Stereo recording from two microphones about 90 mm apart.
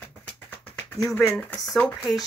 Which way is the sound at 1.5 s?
5° left (ahead or behind).